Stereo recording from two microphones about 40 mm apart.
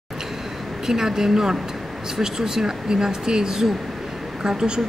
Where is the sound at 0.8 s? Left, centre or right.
Centre.